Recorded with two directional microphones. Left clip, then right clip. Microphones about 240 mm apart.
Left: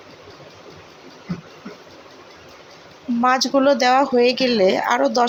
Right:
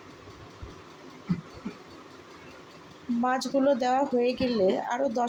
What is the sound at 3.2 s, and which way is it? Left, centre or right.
Speech, centre.